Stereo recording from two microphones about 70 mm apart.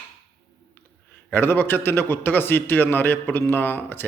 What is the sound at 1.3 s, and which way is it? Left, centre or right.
A man's voice, left.